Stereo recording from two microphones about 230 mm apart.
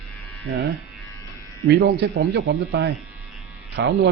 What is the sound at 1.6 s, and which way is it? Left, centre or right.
A man's voice, right.